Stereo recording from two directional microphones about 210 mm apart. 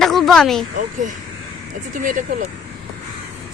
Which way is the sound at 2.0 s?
40° right (ahead or behind).